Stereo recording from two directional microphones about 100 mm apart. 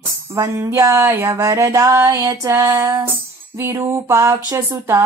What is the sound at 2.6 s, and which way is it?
Female singing, 35° right (ahead or behind).